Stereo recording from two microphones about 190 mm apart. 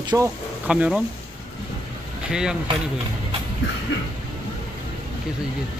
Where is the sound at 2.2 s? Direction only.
5° right (ahead or behind).